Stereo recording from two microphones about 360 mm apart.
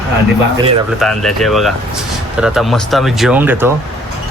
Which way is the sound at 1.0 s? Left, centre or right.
Centre.